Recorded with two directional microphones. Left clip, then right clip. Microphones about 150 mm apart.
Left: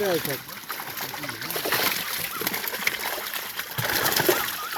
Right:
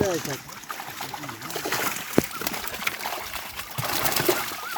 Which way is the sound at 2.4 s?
45° right (ahead or behind).